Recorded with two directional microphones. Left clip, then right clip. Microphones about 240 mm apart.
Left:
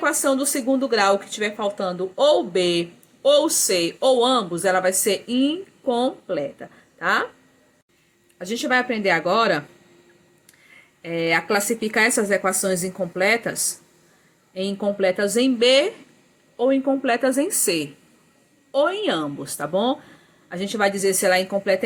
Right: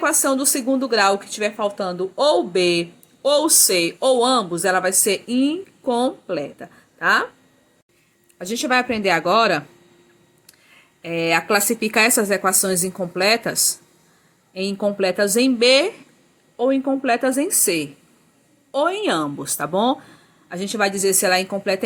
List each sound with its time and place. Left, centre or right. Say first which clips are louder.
0.0 s speech: right 1 dB; centre
8.4 s speech: right 2 dB; centre
11.0 s speech: right 2 dB; centre